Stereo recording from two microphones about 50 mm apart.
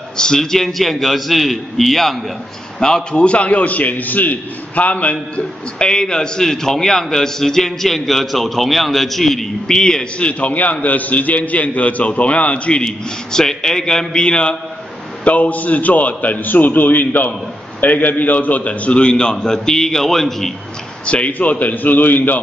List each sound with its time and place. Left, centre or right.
0.2 s a man's voice: centre
2.8 s a man's voice: centre
5.3 s a man's voice: centre
15.2 s a man's voice: left; by 20.5 s centre
21.0 s a man's voice: left